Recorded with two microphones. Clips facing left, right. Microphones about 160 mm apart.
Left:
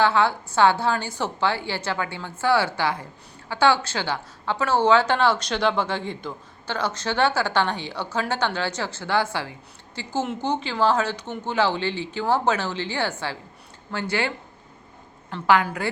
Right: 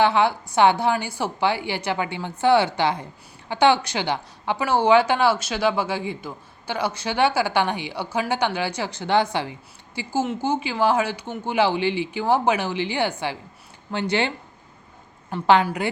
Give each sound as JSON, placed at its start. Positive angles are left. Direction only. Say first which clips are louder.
{"t": 0.0, "sound": "a woman's voice", "louder": "right 1 dB", "side_deg": -15}
{"t": 15.6, "sound": "speech", "louder": "right 3 dB", "side_deg": -20}